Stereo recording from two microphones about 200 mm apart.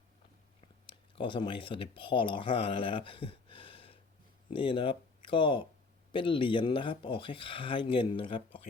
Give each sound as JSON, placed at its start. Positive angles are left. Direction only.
{"t": 0.9, "sound": "speech", "side_deg": 25}